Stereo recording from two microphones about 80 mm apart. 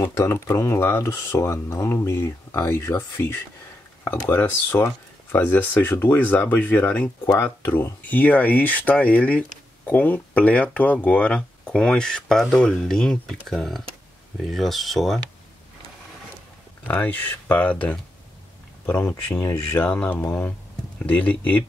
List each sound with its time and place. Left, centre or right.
0.1 s speech: left; by 15.1 s centre
16.8 s speech: left